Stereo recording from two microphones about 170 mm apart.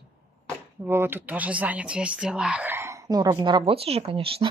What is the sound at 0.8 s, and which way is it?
Speech, 15° right (ahead or behind).